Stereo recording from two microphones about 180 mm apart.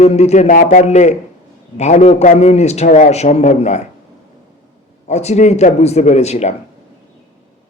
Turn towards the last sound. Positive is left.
turn(degrees=35)  # may be behind; listen again after turning